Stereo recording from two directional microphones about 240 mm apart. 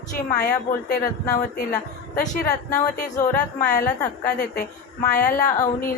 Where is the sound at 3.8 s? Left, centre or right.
Left.